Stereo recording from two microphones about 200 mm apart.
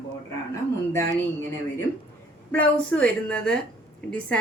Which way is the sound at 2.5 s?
5° left (ahead or behind).